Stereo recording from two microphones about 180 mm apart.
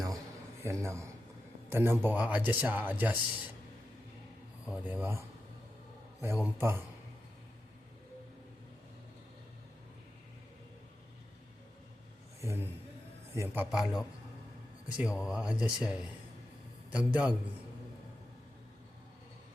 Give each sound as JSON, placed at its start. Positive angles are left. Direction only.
{"t": 0.6, "sound": "a man's voice", "side_deg": -15}
{"t": 4.7, "sound": "a man's voice", "side_deg": -10}
{"t": 6.2, "sound": "a man's voice", "side_deg": -15}
{"t": 12.4, "sound": "a man's voice", "side_deg": -15}